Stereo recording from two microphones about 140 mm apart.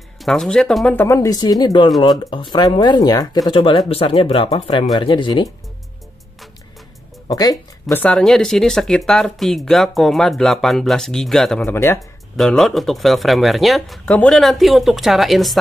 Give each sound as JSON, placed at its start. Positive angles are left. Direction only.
{"t": 0.2, "sound": "speech", "side_deg": 0}
{"t": 0.9, "sound": "speech", "side_deg": 20}
{"t": 3.9, "sound": "speech", "side_deg": 40}
{"t": 7.2, "sound": "speech", "side_deg": 25}
{"t": 7.9, "sound": "speech", "side_deg": 10}
{"t": 11.6, "sound": "speech", "side_deg": 15}
{"t": 12.4, "sound": "speech", "side_deg": 0}